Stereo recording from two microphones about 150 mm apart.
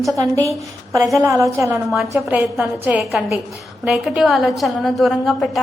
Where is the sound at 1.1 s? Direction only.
20° right (ahead or behind).